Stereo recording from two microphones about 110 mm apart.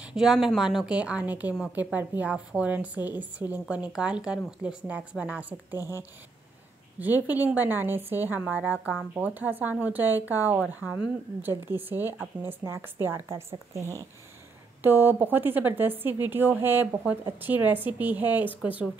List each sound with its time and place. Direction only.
0.0 s a woman's voice: 5° right (ahead or behind)
5.8 s speech: 30° left (ahead or behind)
7.0 s a woman's voice: 15° right (ahead or behind)